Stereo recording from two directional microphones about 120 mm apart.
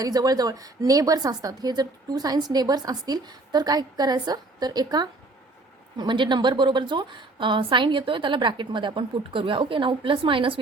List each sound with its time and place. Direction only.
0.0 s a woman's voice: 30° right (ahead or behind); by 10.6 s 45° right (ahead or behind)